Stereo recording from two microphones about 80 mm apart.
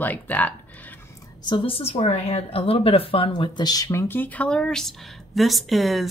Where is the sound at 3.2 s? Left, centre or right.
Left.